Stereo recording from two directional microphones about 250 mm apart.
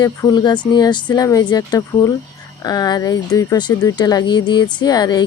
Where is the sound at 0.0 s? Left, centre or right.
Centre.